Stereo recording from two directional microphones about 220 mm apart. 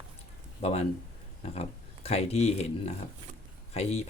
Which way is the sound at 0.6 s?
30° left (ahead or behind).